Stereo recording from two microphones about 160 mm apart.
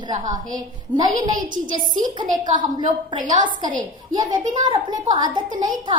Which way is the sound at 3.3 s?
55° right (ahead or behind).